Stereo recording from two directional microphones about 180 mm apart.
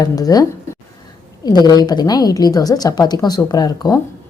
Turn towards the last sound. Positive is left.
turn(degrees=20)  # may be behind; listen again after turning